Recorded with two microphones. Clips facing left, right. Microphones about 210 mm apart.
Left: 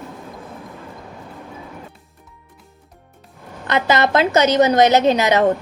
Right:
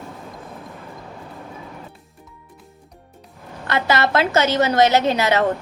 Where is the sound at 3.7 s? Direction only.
20° left (ahead or behind).